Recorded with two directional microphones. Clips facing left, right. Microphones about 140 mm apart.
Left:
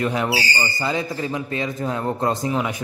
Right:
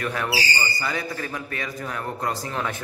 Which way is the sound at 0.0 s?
20° left (ahead or behind).